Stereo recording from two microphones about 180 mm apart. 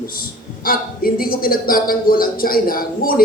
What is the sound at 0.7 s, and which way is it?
Speech, 55° left (ahead or behind).